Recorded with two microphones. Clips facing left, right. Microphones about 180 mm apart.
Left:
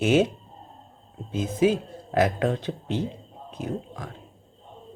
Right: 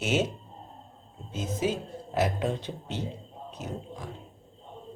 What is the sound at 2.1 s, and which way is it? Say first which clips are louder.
Speech: left 5 dB; 65° left (ahead or behind).